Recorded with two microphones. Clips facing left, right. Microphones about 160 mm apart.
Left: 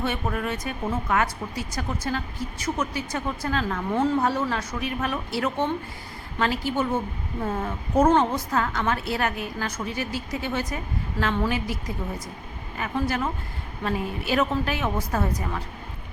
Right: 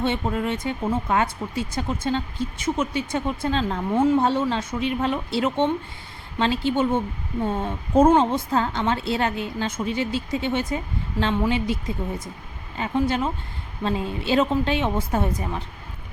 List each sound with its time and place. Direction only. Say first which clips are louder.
0.0 s speech: right 3 dB; 25° right (ahead or behind)
3.9 s a woman's voice: right 4 dB; 15° right (ahead or behind)
4.2 s speech: right 3 dB; 25° right (ahead or behind)